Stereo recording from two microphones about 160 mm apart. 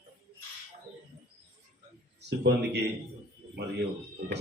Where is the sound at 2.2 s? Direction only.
90° right.